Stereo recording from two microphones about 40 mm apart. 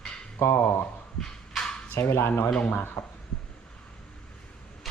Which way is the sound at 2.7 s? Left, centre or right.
Left.